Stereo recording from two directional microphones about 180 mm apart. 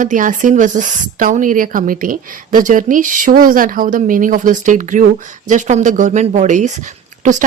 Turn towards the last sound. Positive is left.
turn(degrees=-40)  # may be behind; listen again after turning